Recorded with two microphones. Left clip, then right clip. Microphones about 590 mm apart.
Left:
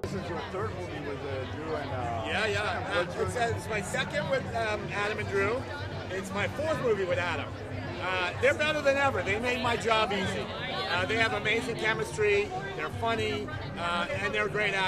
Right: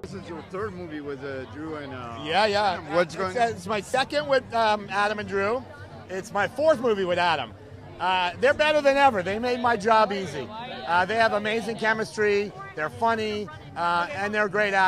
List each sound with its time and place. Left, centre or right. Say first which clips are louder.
2.2 s speech: right 10 dB; right